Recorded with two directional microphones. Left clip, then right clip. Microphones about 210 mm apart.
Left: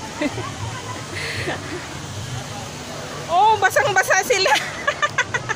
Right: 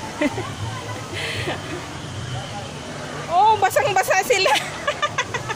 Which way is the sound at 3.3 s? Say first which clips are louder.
Left 1 dB; 5° left (ahead or behind).